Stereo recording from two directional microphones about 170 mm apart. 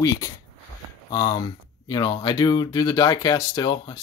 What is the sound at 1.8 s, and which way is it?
Speech, 25° left (ahead or behind).